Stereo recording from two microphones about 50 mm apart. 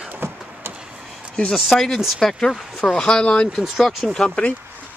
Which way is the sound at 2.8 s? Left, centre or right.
Centre.